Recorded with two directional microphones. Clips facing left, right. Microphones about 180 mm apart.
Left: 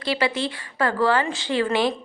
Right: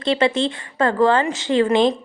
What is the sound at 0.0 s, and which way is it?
A woman's voice, 25° right (ahead or behind).